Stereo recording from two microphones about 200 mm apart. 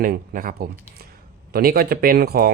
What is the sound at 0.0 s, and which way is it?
Speech, 45° right (ahead or behind).